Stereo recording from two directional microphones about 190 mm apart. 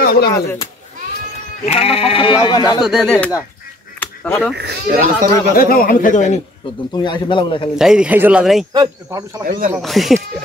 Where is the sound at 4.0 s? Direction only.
10° left (ahead or behind).